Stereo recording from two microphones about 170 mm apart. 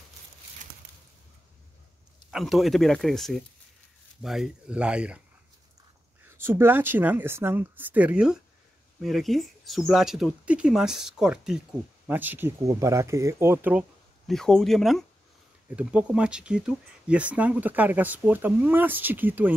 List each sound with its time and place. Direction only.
2.3 s speech: centre (ahead or behind)
6.2 s speech: 15° right (ahead or behind)
14.2 s speech: 5° left (ahead or behind)